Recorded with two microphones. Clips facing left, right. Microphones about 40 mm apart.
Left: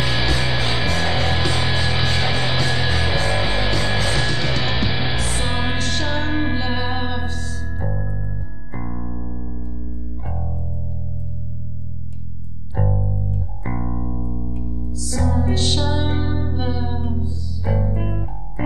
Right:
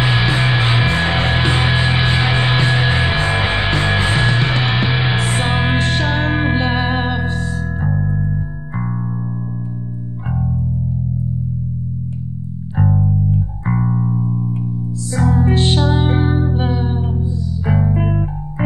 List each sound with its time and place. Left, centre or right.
0.0 s music: right
12.7 s music: right